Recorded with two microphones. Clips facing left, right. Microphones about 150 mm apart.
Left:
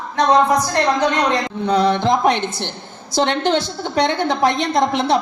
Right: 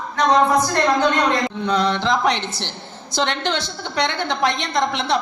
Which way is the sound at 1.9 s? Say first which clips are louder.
Left 3 dB; 50° left (ahead or behind).